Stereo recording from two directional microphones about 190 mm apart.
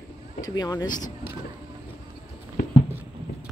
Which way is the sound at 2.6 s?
55° left (ahead or behind).